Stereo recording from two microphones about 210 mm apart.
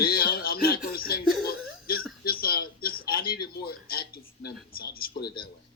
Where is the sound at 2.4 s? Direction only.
45° left (ahead or behind).